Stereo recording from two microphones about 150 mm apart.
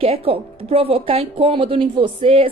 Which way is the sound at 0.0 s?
40° right (ahead or behind).